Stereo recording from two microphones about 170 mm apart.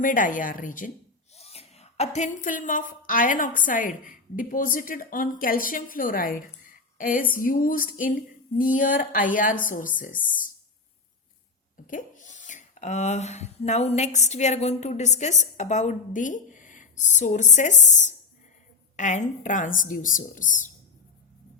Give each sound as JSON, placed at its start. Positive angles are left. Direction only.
{"t": 0.0, "sound": "a woman's voice", "side_deg": 50}
{"t": 1.4, "sound": "a sound", "side_deg": 35}
{"t": 3.1, "sound": "a woman's voice", "side_deg": 50}
{"t": 11.9, "sound": "a woman's voice", "side_deg": 50}